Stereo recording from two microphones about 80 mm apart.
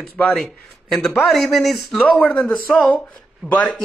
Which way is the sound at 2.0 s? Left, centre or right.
Centre.